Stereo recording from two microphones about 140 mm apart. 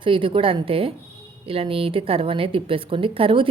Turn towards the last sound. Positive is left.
turn(degrees=-40)  # may be behind; listen again after turning